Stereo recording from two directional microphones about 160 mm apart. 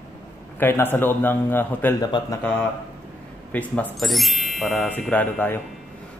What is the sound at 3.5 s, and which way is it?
Speech, 10° left (ahead or behind).